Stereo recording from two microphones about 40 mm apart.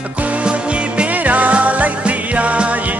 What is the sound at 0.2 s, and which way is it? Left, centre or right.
Music, right.